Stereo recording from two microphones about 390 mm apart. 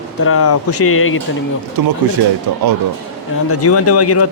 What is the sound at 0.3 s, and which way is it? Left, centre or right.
Speech, left.